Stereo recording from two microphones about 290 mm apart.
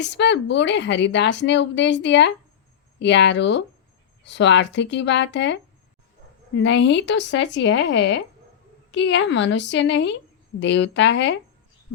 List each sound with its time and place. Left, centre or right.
0.0 s a woman's voice: left
6.6 s a woman's voice: left
11.9 s a sound: left